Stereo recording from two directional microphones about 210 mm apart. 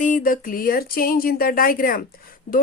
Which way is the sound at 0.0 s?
40° left (ahead or behind).